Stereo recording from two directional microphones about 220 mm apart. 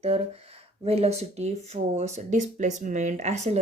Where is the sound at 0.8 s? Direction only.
30° right (ahead or behind).